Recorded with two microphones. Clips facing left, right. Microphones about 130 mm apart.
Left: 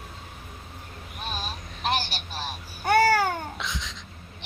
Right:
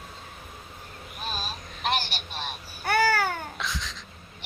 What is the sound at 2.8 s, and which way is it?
Babbling, 20° left (ahead or behind).